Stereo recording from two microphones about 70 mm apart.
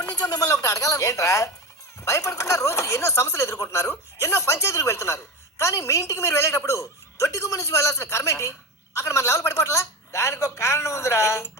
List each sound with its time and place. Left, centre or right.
0.0 s a man's voice: left